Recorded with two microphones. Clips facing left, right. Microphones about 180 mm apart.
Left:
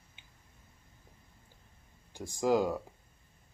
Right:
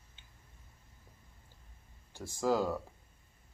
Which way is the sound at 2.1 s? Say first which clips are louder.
Left 3 dB; 15° left (ahead or behind).